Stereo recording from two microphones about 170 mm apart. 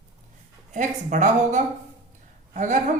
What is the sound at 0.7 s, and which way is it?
A woman's voice, 50° right (ahead or behind).